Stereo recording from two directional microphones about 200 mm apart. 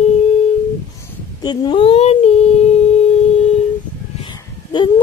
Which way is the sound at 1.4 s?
25° left (ahead or behind).